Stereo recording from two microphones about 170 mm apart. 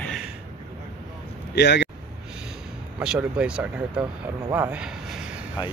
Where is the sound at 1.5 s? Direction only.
85° left.